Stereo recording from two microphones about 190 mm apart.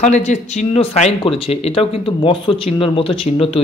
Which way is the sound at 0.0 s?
40° left (ahead or behind).